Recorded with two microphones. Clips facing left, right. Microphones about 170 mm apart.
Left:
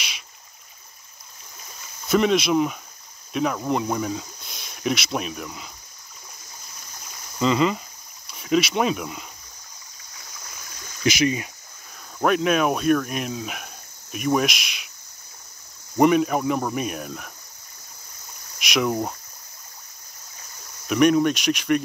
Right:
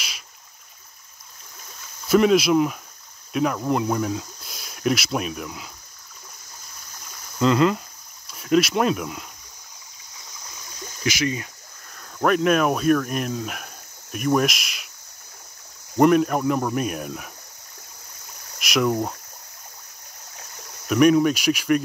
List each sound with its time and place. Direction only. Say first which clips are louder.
2.0 s speech: right 3 dB; 5° right (ahead or behind)
7.3 s speech: right 2 dB; centre (ahead or behind)
11.1 s speech: left 3 dB; 20° left (ahead or behind)
12.2 s speech: right 1 dB; centre (ahead or behind)
16.0 s speech: right 1 dB; centre (ahead or behind)
18.6 s speech: right 2 dB; centre (ahead or behind)
20.9 s speech: right 1 dB; centre (ahead or behind)